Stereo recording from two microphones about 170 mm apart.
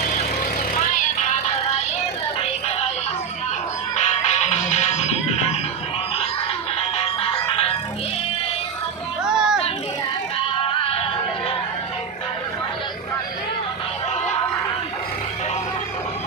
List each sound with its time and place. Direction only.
0.0 s vehicle: 50° left (ahead or behind)
3.9 s music: 40° left (ahead or behind)
6.9 s music: 35° left (ahead or behind)
9.2 s a sound: 5° right (ahead or behind)